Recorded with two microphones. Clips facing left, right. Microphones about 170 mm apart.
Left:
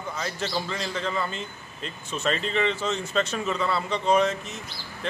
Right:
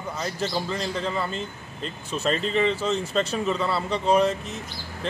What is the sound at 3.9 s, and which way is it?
Speech, 35° right (ahead or behind).